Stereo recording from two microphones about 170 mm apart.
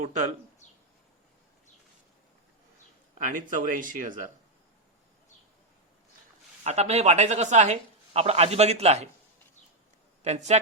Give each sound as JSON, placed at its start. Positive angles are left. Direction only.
{"t": 0.0, "sound": "speech", "side_deg": -45}
{"t": 3.2, "sound": "speech", "side_deg": -50}
{"t": 6.7, "sound": "speech", "side_deg": -40}
{"t": 10.2, "sound": "speech", "side_deg": -40}